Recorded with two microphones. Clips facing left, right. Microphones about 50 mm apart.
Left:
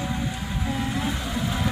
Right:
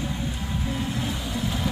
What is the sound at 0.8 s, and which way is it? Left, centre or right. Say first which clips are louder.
Vehicle: left 4 dB; left.